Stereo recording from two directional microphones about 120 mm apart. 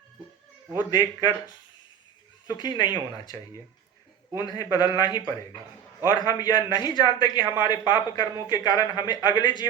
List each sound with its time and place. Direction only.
0.9 s speech: 35° left (ahead or behind)
2.6 s speech: 35° left (ahead or behind)
4.4 s speech: 35° left (ahead or behind)